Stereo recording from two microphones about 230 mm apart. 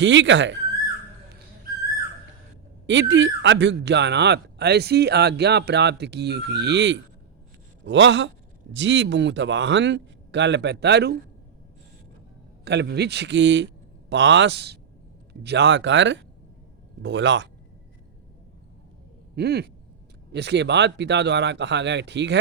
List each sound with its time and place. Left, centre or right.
0.0 s speech: right
2.8 s speech: right
12.6 s speech: right
19.4 s speech: right